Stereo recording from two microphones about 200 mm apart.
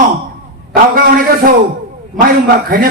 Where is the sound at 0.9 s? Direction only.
45° right (ahead or behind).